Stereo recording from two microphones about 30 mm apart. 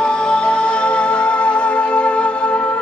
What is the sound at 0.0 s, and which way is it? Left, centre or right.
Music, left.